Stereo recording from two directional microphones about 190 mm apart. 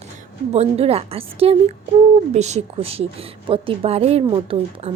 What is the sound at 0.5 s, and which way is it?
A woman's voice, 35° right (ahead or behind).